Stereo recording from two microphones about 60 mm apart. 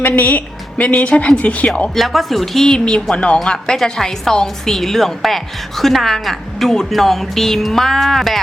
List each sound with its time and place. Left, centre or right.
0.1 s a woman's voice: left
2.0 s a woman's voice: centre